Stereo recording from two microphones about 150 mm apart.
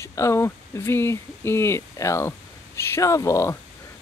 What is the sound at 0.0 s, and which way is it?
Speech, 20° left (ahead or behind).